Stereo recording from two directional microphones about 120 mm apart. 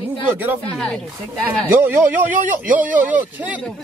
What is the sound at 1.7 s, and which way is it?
Speech, 15° right (ahead or behind).